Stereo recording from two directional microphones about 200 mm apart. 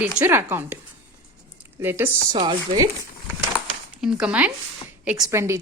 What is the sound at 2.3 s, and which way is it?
Speech, 25° right (ahead or behind).